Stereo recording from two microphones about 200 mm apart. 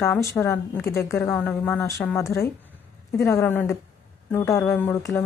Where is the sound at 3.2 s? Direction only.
15° left (ahead or behind).